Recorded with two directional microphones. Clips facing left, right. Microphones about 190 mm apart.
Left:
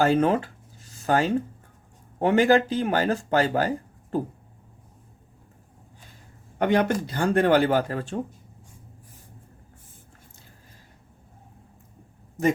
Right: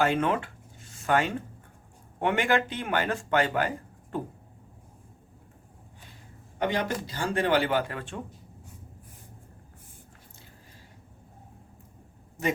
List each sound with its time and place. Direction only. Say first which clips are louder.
0.0 s speech: left 5 dB; 35° left (ahead or behind)
6.6 s speech: left 6 dB; 55° left (ahead or behind); by 8.2 s 40° left (ahead or behind)